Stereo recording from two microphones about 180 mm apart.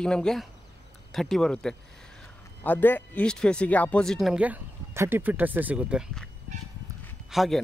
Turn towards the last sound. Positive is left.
turn(degrees=0)  # may be behind; listen again after turning